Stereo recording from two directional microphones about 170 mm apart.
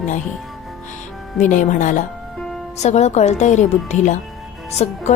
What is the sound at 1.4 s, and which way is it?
A woman's voice, 45° left (ahead or behind).